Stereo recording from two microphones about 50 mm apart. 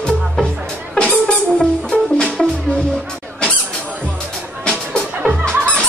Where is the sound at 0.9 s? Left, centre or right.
Centre.